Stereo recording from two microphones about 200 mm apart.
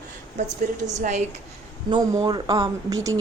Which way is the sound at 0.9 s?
35° right (ahead or behind).